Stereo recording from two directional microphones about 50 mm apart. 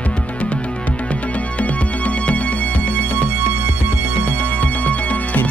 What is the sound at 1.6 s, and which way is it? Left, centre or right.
Music, left.